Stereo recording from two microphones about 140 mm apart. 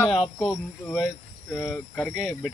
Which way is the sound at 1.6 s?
10° left (ahead or behind).